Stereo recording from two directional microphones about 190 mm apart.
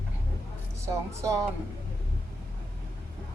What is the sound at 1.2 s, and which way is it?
Speech, 15° right (ahead or behind).